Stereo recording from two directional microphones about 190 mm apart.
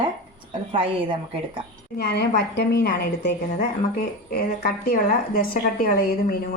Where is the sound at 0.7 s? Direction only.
30° right (ahead or behind).